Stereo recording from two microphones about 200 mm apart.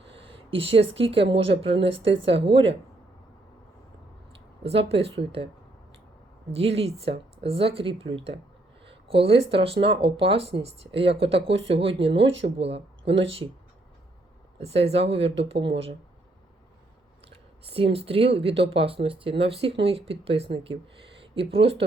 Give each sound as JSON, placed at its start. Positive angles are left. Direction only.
{"t": 0.0, "sound": "a sound", "side_deg": -30}
{"t": 1.5, "sound": "speech", "side_deg": -30}
{"t": 4.6, "sound": "speech", "side_deg": -30}
{"t": 6.5, "sound": "speech", "side_deg": -30}
{"t": 14.6, "sound": "speech", "side_deg": -30}
{"t": 17.7, "sound": "speech", "side_deg": -30}